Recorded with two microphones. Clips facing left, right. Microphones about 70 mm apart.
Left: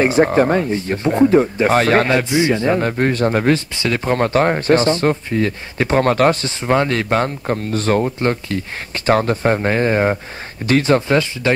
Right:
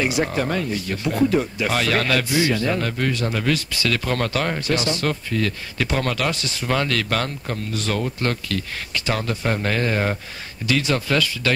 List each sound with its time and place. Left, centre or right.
0.0 s speech: left
6.6 s speech: left
9.0 s speech: left